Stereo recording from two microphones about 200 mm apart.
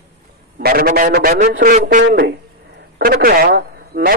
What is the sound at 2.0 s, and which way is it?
Speech, 55° right (ahead or behind).